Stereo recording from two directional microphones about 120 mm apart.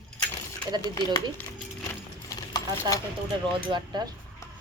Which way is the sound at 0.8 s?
35° left (ahead or behind).